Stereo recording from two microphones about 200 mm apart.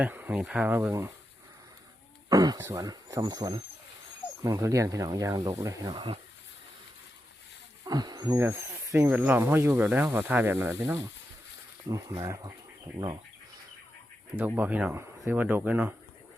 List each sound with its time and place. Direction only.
0.0 s speech: 10° right (ahead or behind)
2.3 s speech: 20° right (ahead or behind)
7.9 s speech: 20° right (ahead or behind)
14.3 s speech: 10° right (ahead or behind)